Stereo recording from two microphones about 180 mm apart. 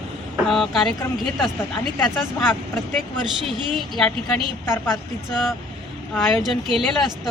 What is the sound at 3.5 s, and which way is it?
Speech, centre (ahead or behind).